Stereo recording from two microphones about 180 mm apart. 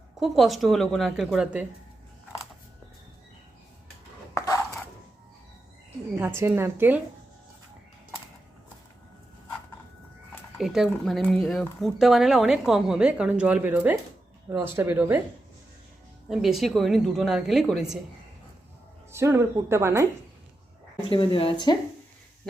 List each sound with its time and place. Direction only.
0.2 s a woman's voice: centre (ahead or behind)
4.4 s chopping: 20° left (ahead or behind)
6.1 s speech: 10° right (ahead or behind)
10.6 s a woman's voice: centre (ahead or behind)
16.3 s a woman's voice: centre (ahead or behind)
19.1 s speech: 15° right (ahead or behind)
21.1 s speech: 30° left (ahead or behind)